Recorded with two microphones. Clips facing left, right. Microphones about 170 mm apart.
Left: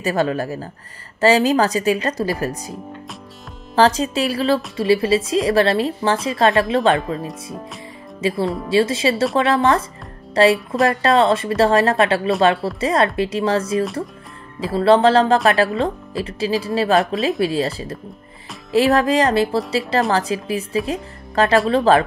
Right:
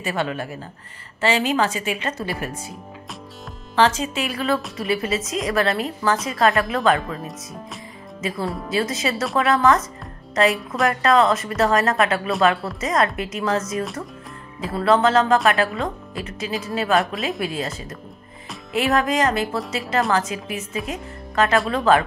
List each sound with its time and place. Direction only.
0.0 s a woman's voice: 40° left (ahead or behind)
3.7 s a woman's voice: 35° left (ahead or behind)
8.2 s a woman's voice: 30° left (ahead or behind)